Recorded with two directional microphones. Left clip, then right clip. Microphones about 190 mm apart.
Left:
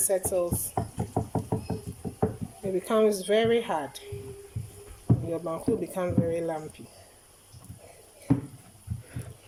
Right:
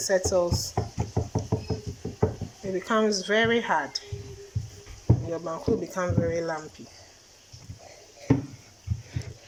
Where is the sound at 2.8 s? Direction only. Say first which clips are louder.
Left 1 dB; 20° left (ahead or behind).